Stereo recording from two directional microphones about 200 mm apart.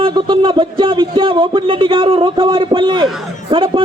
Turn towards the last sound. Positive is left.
turn(degrees=-25)  # may be behind; listen again after turning